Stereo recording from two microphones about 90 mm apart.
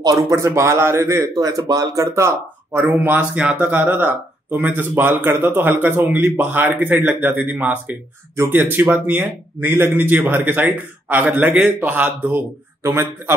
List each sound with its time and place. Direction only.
0.3 s speech: 35° right (ahead or behind); by 12.4 s 15° right (ahead or behind)
12.8 s speech: 25° right (ahead or behind)